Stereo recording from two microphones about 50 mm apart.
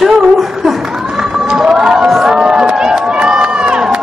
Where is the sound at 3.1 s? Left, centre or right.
Centre.